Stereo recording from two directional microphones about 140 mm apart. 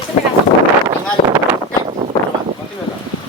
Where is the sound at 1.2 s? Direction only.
40° left (ahead or behind).